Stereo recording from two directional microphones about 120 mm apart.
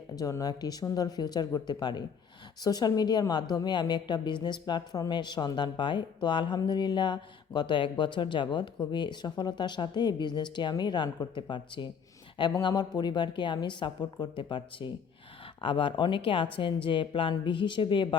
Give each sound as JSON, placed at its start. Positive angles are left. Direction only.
{"t": 0.2, "sound": "speech", "side_deg": 30}